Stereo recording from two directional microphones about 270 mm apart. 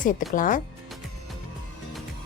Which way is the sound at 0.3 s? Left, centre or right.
Left.